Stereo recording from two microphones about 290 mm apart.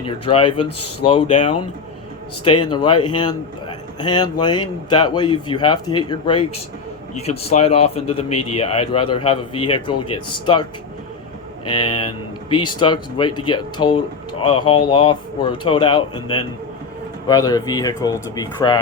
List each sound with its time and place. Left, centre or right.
0.0 s speech: centre
4.0 s speech: centre
8.3 s a man's voice: left
8.5 s speech: centre
11.8 s speech: centre